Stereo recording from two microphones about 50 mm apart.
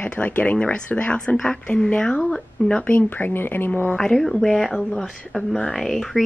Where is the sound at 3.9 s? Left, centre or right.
Centre.